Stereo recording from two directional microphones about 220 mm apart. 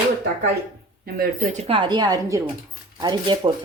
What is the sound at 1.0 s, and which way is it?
Speech, 35° right (ahead or behind).